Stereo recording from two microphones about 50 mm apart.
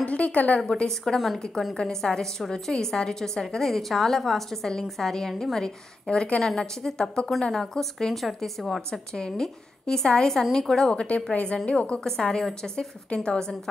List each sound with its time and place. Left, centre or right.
0.0 s a woman's voice: left
1.0 s a woman's voice: centre
1.8 s a woman's voice: centre
11.0 s a woman's voice: centre